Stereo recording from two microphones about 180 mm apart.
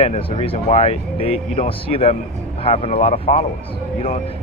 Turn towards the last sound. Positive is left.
turn(degrees=40)  # may be behind; listen again after turning